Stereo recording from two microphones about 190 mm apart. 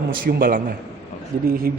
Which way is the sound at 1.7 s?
50° right (ahead or behind).